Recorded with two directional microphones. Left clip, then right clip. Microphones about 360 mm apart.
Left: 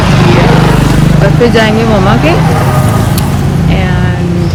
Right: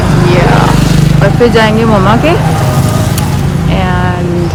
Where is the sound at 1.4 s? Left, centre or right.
Centre.